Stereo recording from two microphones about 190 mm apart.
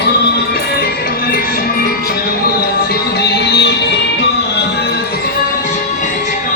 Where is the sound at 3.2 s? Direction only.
65° left (ahead or behind).